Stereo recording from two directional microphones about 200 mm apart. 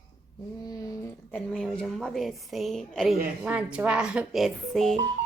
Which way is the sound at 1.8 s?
5° left (ahead or behind).